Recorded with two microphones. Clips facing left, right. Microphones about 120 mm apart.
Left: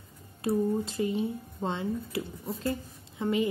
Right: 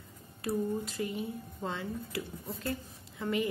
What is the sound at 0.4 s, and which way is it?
Speech, 25° left (ahead or behind).